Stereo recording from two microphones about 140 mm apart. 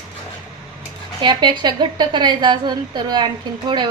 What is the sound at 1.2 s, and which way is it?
A woman's voice, 30° right (ahead or behind).